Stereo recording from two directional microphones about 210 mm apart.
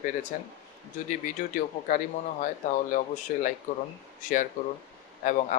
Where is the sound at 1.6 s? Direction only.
40° left (ahead or behind).